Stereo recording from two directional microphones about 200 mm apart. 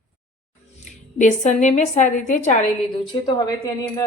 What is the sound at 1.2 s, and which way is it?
A woman's voice, 35° left (ahead or behind).